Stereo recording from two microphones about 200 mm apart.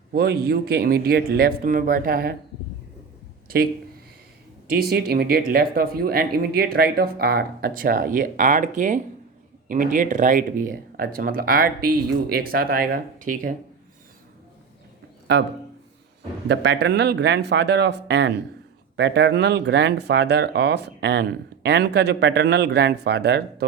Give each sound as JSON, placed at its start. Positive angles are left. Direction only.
{"t": 0.1, "sound": "speech", "side_deg": -50}
{"t": 4.7, "sound": "speech", "side_deg": -50}
{"t": 15.3, "sound": "speech", "side_deg": -60}
{"t": 16.5, "sound": "speech", "side_deg": -60}